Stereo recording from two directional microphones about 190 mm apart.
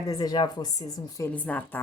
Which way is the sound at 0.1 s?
20° left (ahead or behind).